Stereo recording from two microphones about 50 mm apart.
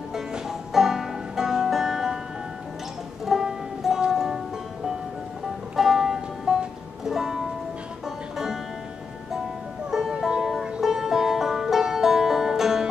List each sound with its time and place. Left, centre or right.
0.1 s music: centre
3.3 s music: centre
5.8 s music: centre
9.8 s music: centre